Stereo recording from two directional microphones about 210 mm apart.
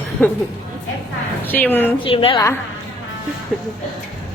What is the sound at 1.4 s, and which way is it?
Speech, 10° left (ahead or behind).